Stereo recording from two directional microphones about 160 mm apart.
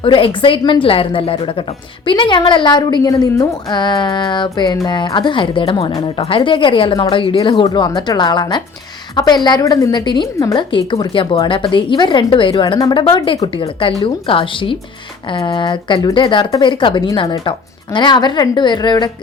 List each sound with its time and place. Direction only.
0.0 s a woman's voice: 35° left (ahead or behind)